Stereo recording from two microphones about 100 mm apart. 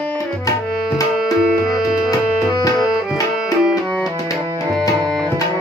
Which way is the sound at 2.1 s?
45° left (ahead or behind).